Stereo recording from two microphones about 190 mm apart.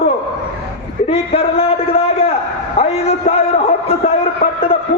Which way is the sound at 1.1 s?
30° left (ahead or behind).